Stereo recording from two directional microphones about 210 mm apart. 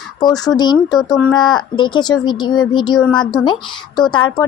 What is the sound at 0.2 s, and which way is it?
Speech, 20° left (ahead or behind).